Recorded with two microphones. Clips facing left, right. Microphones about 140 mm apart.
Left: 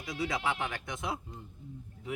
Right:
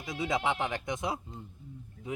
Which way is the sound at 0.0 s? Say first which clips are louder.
Right 2 dB; 20° right (ahead or behind).